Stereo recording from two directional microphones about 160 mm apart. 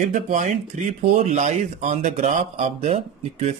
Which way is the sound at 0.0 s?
55° right (ahead or behind).